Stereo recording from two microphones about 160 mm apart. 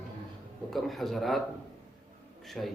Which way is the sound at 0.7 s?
Centre (ahead or behind).